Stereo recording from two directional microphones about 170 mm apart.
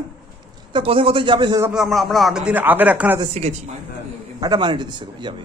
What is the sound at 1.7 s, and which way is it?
A man's voice, centre (ahead or behind).